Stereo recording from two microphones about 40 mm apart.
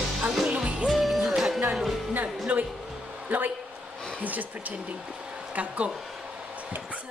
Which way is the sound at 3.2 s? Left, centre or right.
Right.